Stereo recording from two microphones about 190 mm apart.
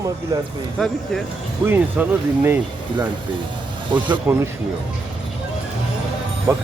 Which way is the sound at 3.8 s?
25° right (ahead or behind).